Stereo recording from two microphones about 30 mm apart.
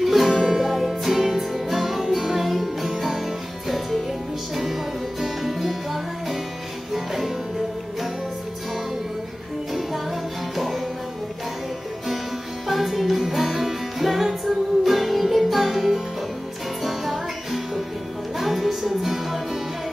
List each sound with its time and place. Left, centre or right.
0.0 s music: centre
5.2 s music: centre
10.5 s music: centre
12.6 s music: centre